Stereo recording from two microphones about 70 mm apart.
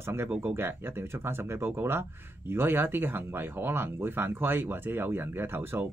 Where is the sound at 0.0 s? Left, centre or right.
Right.